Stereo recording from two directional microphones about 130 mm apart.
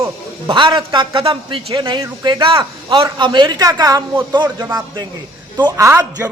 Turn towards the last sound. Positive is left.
turn(degrees=-20)  # may be behind; listen again after turning